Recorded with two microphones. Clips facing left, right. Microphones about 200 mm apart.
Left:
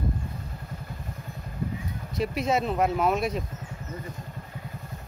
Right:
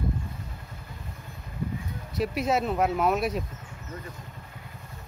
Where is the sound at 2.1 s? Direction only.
Centre (ahead or behind).